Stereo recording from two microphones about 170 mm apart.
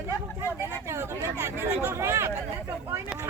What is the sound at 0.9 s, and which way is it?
Speech, 15° right (ahead or behind).